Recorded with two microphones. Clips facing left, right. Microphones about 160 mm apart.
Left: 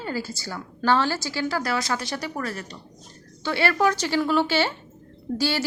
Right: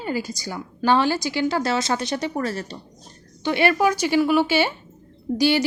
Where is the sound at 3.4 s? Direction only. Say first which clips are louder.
Right 3 dB; 15° right (ahead or behind).